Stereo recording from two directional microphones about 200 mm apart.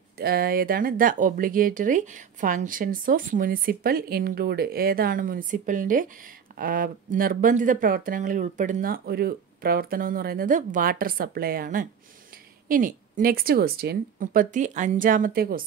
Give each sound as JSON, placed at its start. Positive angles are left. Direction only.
{"t": 0.2, "sound": "speech", "side_deg": -50}